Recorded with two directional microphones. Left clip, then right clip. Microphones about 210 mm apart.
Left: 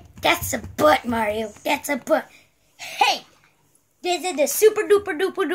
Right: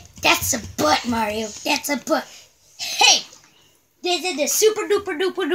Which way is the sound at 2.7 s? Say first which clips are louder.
Right 4 dB; 25° right (ahead or behind).